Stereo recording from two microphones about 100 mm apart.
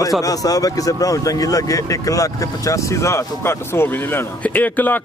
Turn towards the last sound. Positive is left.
turn(degrees=20)  # may be behind; listen again after turning